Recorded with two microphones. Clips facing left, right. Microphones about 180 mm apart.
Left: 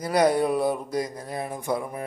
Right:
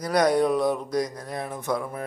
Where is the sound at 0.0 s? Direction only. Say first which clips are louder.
Even; 10° left (ahead or behind).